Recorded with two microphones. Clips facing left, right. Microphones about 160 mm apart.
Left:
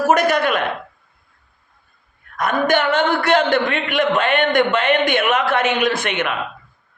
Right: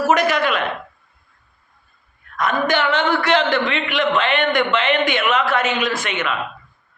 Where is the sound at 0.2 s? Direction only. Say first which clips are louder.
Left 1 dB; 50° left (ahead or behind).